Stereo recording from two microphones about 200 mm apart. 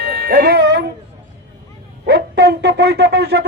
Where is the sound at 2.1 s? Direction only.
55° right (ahead or behind).